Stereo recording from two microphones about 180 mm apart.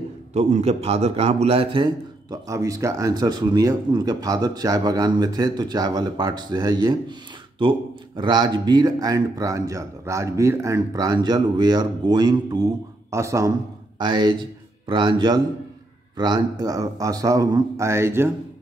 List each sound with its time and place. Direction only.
0.3 s a man's voice: 35° right (ahead or behind)
2.4 s a man's voice: 20° right (ahead or behind)